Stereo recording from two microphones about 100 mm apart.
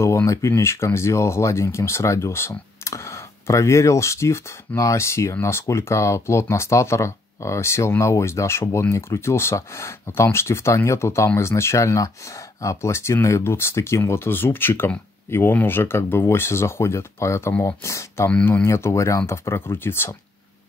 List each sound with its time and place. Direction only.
0.0 s speech: 30° left (ahead or behind)